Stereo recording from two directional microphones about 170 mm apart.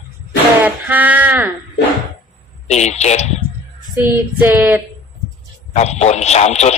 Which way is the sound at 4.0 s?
10° right (ahead or behind).